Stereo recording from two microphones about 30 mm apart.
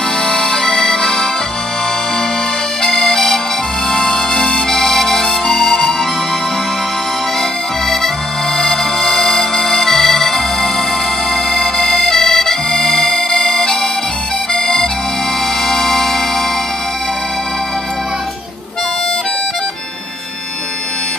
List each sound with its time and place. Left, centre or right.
0.3 s music: centre
2.9 s music: centre
8.5 s music: centre
9.3 s accordion: centre
11.5 s music: centre
12.1 s accordion: centre
13.3 s music: centre
14.5 s accordion: centre
15.7 s music: centre